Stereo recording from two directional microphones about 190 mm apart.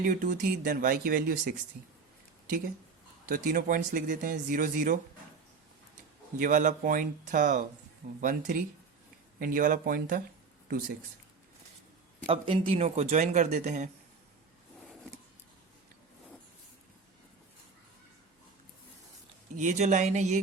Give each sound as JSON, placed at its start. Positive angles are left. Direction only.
{"t": 0.0, "sound": "speech", "side_deg": -45}
{"t": 3.2, "sound": "speech", "side_deg": -45}
{"t": 6.3, "sound": "speech", "side_deg": -45}
{"t": 12.2, "sound": "speech", "side_deg": -25}
{"t": 19.5, "sound": "speech", "side_deg": -40}